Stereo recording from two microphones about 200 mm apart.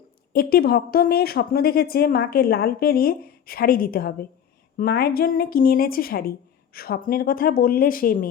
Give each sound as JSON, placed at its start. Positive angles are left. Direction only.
{"t": 0.3, "sound": "a woman's voice", "side_deg": 50}